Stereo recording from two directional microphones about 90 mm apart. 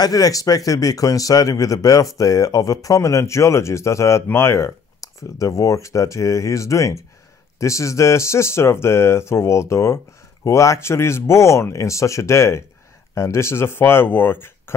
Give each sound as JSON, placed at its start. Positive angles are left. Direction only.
{"t": 0.0, "sound": "a man's voice", "side_deg": 40}